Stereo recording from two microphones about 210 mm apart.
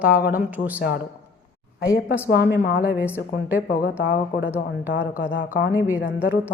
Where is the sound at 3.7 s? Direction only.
45° left (ahead or behind).